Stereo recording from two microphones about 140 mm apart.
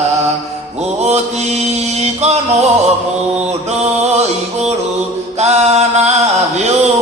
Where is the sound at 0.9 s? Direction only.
50° right (ahead or behind).